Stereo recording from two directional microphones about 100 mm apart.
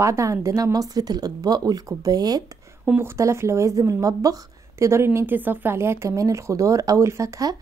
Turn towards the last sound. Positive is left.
turn(degrees=-35)  # may be behind; listen again after turning